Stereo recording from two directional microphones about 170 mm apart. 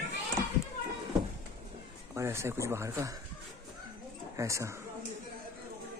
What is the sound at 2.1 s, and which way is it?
Speech, 15° right (ahead or behind).